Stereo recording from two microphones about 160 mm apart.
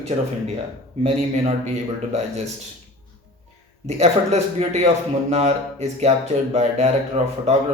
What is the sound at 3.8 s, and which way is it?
Speech, 45° right (ahead or behind).